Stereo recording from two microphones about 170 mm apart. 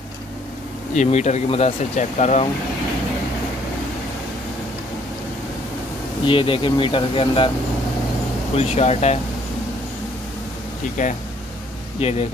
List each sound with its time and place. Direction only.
0.9 s speech: 45° left (ahead or behind)
6.2 s speech: 30° left (ahead or behind)
8.5 s speech: 40° left (ahead or behind)
11.0 s speech: 50° left (ahead or behind)
12.0 s speech: 35° left (ahead or behind)